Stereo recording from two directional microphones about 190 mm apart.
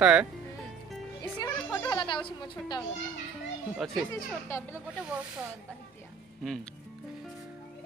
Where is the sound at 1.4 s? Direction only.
15° left (ahead or behind).